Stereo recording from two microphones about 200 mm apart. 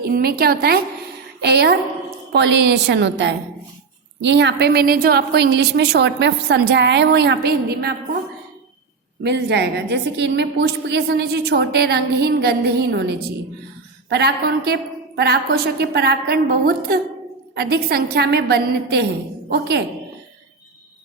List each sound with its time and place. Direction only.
0.0 s a woman's voice: 50° right (ahead or behind)
9.2 s a woman's voice: 60° right (ahead or behind)